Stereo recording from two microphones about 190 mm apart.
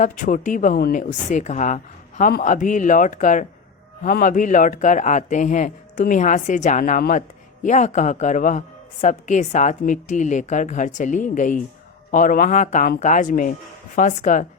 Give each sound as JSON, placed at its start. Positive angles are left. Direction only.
{"t": 0.0, "sound": "a woman's voice", "side_deg": 45}